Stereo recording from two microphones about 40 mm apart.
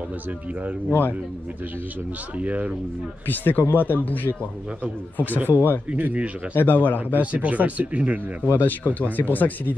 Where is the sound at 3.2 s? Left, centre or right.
Left.